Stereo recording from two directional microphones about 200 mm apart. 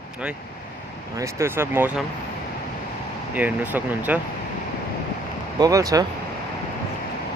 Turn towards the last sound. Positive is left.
turn(degrees=-15)  # may be behind; listen again after turning